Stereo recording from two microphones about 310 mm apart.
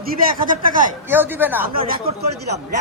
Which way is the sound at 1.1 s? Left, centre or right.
Centre.